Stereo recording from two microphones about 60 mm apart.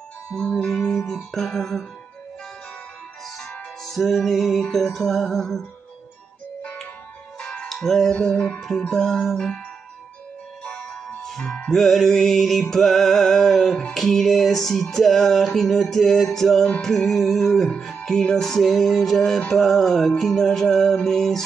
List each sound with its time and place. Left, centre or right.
0.4 s music: centre
3.3 s music: centre
6.6 s music: centre
11.2 s music: centre